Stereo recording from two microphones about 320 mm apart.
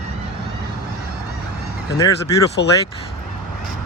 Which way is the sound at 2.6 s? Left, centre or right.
Left.